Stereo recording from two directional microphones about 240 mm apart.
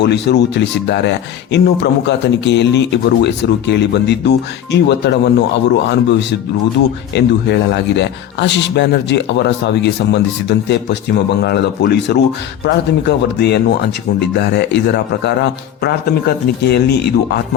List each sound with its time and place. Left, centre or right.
0.0 s speech: left